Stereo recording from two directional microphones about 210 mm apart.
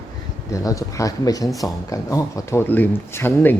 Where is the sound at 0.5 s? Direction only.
15° left (ahead or behind).